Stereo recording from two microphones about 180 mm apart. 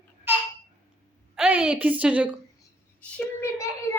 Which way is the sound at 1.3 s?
5° right (ahead or behind).